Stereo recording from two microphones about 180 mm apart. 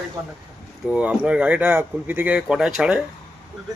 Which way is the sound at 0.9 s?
5° right (ahead or behind).